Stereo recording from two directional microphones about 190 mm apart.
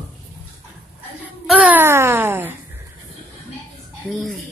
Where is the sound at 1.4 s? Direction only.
5° right (ahead or behind).